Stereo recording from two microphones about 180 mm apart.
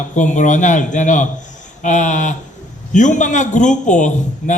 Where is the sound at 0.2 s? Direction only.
45° left (ahead or behind).